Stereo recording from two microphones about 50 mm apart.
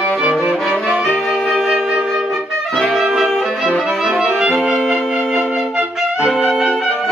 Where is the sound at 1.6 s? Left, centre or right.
Centre.